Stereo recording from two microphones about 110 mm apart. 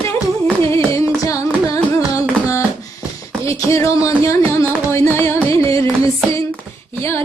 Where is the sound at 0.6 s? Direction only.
25° left (ahead or behind).